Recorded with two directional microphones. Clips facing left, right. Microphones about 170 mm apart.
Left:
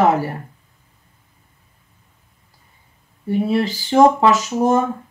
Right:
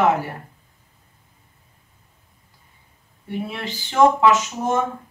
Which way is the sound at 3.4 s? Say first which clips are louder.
Left 11 dB; 35° left (ahead or behind).